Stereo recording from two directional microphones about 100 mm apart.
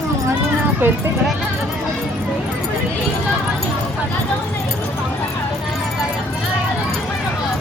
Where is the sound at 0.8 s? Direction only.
20° right (ahead or behind).